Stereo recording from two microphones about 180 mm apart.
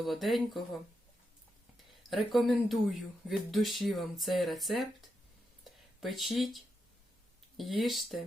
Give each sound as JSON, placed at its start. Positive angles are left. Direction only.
{"t": 0.0, "sound": "speech", "side_deg": 0}
{"t": 2.0, "sound": "speech", "side_deg": 0}
{"t": 5.7, "sound": "a sound", "side_deg": 0}
{"t": 6.0, "sound": "speech", "side_deg": 0}